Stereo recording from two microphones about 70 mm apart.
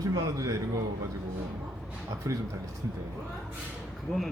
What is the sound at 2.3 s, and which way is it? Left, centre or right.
Speech, right.